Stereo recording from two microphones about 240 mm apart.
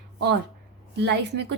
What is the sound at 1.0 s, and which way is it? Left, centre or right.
Speech, right.